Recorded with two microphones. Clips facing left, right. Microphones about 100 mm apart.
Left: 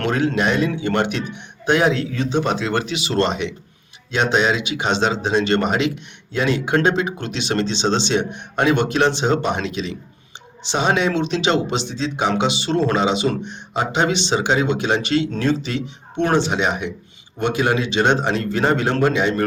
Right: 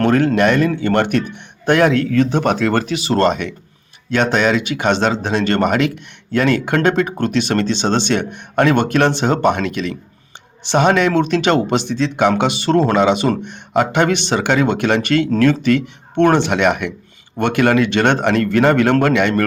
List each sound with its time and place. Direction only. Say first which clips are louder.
0.0 s speech: right 6 dB; 50° right (ahead or behind)